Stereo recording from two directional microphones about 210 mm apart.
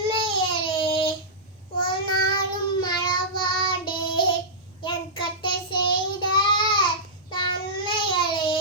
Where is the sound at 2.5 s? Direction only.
20° left (ahead or behind).